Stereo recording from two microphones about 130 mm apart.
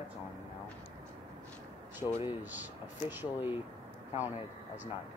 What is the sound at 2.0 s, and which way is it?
Speech, 15° right (ahead or behind).